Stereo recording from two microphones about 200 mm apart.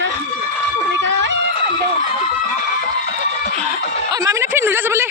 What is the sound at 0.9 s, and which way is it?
Music, 65° right (ahead or behind).